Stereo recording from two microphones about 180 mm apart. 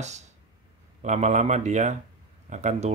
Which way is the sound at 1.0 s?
40° right (ahead or behind).